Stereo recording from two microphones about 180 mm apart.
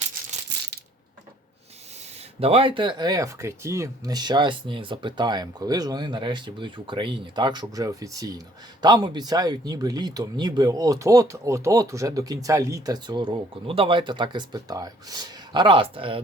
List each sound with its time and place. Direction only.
2.4 s speech: 30° right (ahead or behind)